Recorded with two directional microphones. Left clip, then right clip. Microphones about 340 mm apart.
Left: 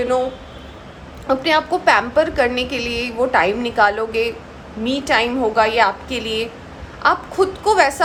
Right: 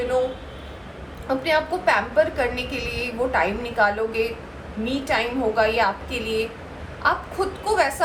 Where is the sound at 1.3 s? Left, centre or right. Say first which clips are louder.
Left 5 dB; left.